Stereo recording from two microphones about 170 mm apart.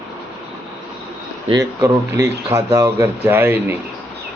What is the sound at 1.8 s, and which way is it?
Speech, 15° right (ahead or behind).